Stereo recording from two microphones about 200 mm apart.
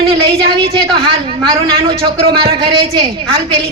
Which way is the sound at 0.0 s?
30° right (ahead or behind).